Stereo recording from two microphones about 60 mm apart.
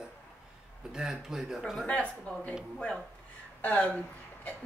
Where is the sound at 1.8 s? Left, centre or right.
Left.